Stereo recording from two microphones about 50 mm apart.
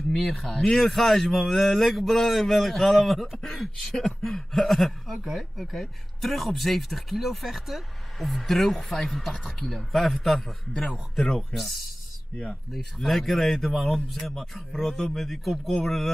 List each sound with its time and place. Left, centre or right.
0.1 s speech: centre